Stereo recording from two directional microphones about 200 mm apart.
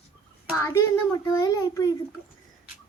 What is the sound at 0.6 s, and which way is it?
A child's voice, 15° left (ahead or behind).